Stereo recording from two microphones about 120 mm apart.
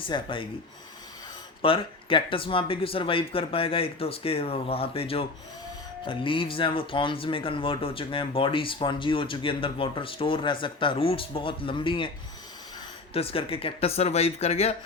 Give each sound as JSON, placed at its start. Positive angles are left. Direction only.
{"t": 0.0, "sound": "speech", "side_deg": 45}
{"t": 1.6, "sound": "speech", "side_deg": 45}
{"t": 13.1, "sound": "speech", "side_deg": 50}